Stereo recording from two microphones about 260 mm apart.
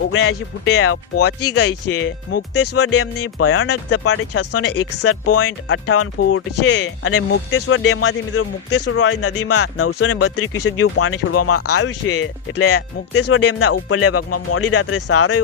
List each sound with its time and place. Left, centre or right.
0.1 s speech: left